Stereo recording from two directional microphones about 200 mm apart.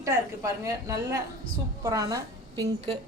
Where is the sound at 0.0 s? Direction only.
15° right (ahead or behind).